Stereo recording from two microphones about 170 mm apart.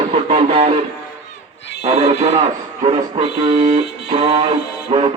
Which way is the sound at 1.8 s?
35° right (ahead or behind).